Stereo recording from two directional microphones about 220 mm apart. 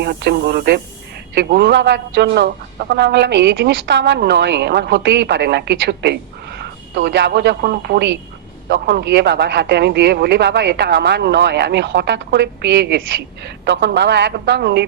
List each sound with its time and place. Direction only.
0.0 s speech: 45° right (ahead or behind)